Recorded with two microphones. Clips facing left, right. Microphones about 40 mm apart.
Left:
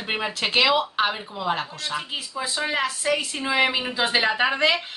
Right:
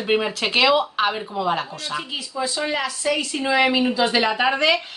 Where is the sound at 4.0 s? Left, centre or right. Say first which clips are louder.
Left 1 dB; centre.